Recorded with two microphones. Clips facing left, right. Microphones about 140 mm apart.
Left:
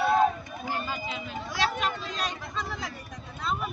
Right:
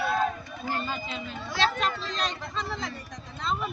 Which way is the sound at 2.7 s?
5° left (ahead or behind).